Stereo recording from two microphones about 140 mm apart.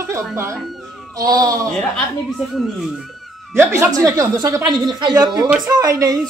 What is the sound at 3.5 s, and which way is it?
Speech, 20° right (ahead or behind).